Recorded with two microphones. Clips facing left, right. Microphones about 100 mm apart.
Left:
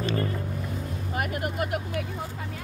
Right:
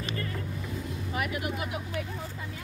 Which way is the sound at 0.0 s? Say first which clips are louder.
Left 7 dB; 30° left (ahead or behind).